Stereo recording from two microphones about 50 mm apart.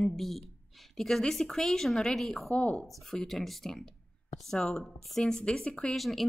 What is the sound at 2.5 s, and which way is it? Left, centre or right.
Speech, left.